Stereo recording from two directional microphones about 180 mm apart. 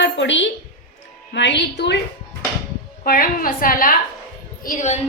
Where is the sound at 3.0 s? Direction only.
55° left (ahead or behind).